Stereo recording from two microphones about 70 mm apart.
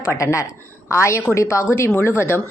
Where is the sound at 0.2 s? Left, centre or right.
Left.